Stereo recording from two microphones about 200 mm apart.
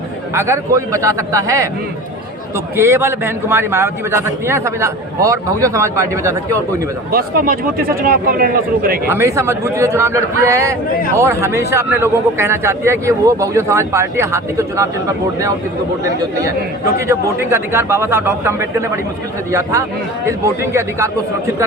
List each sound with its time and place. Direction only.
0.3 s a man's voice: 15° right (ahead or behind)
2.7 s a man's voice: 10° right (ahead or behind)
7.1 s speech: 50° right (ahead or behind)
9.0 s a man's voice: 15° right (ahead or behind)
17.1 s a man's voice: 15° right (ahead or behind)